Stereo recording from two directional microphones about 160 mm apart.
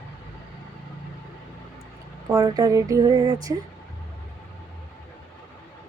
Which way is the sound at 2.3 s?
25° right (ahead or behind).